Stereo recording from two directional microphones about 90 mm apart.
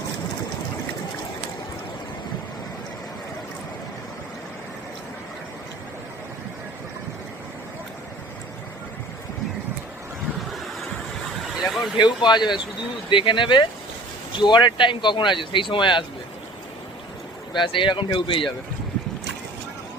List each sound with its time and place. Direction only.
11.4 s vehicle: centre (ahead or behind)
11.9 s speech: 55° left (ahead or behind)
17.6 s speech: 65° left (ahead or behind)